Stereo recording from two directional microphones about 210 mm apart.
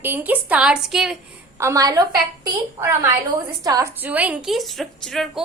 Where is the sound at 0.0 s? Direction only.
10° right (ahead or behind).